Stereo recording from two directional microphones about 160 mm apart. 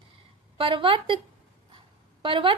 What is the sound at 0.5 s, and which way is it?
Speech, 30° right (ahead or behind).